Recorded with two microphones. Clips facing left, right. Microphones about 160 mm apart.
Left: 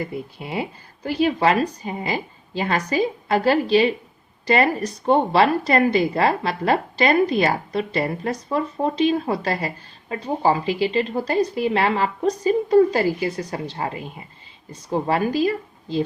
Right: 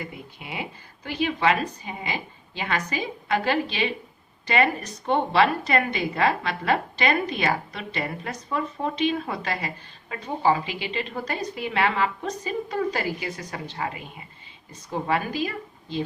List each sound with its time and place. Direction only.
0.0 s a woman's voice: 35° left (ahead or behind)